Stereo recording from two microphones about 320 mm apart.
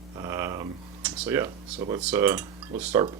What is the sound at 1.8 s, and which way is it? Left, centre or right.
Speech, centre.